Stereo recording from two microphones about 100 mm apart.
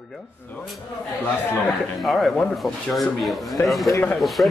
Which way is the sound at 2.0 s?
Centre (ahead or behind).